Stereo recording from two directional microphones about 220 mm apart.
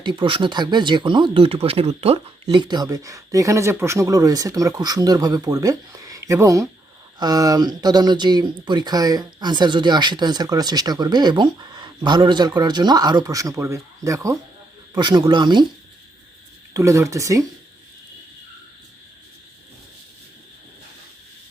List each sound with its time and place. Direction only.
0.0 s speech: 20° right (ahead or behind)
16.7 s speech: 15° right (ahead or behind)